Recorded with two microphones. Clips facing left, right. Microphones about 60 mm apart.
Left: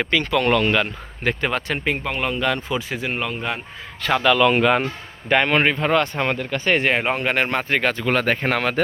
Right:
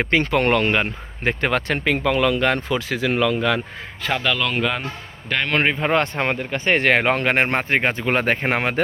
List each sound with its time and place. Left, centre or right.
0.0 s speech: right
1.4 s speech: right
2.6 s speech: right
4.0 s speech: centre
4.5 s speech: left
5.3 s a man's voice: left
5.8 s speech: right
6.7 s speech: right
7.3 s speech: right